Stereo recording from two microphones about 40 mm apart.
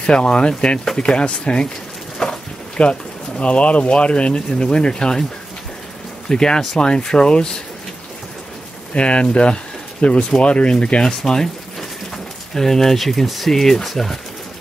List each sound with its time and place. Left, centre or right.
0.0 s speech: left
2.2 s a sound: centre
2.8 s speech: left
6.2 s speech: centre
8.9 s speech: left
11.1 s speech: centre
12.5 s speech: centre